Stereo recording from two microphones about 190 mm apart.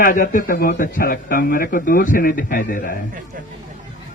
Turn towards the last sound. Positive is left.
turn(degrees=45)  # may be behind; listen again after turning